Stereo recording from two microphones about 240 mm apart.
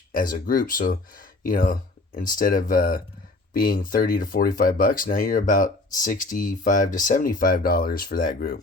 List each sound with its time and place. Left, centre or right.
0.1 s speech: left